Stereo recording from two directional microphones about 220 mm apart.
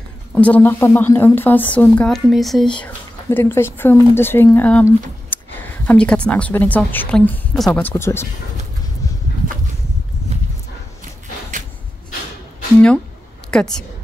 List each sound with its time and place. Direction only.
0.3 s a woman's voice: 5° left (ahead or behind)
9.0 s a sound: 15° left (ahead or behind)
13.5 s a woman's voice: 5° left (ahead or behind)